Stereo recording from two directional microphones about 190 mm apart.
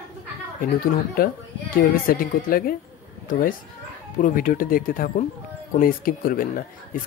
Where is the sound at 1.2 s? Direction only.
50° left (ahead or behind).